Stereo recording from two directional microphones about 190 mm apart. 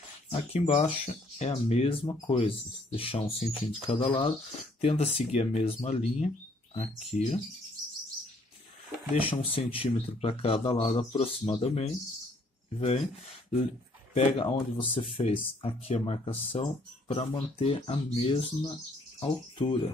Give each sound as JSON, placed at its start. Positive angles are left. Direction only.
{"t": 0.5, "sound": "speech", "side_deg": 35}
{"t": 9.2, "sound": "speech", "side_deg": 30}